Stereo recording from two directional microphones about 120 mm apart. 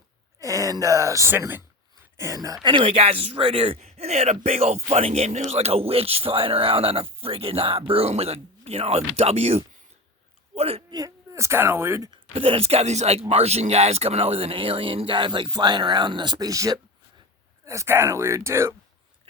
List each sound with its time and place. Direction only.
0.3 s speech: 25° right (ahead or behind)
2.6 s speech: 50° right (ahead or behind)
10.9 s a woman's voice: 30° right (ahead or behind)
12.1 s speech: 50° right (ahead or behind); by 18.7 s 20° right (ahead or behind)